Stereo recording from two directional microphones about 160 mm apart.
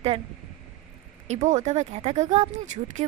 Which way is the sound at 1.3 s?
45° right (ahead or behind).